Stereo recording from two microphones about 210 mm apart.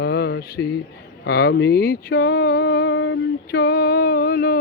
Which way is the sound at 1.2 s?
50° left (ahead or behind).